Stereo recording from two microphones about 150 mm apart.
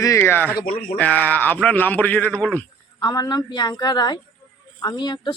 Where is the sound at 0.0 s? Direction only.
20° left (ahead or behind).